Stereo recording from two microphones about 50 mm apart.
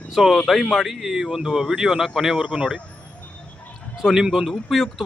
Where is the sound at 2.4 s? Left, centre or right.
Centre.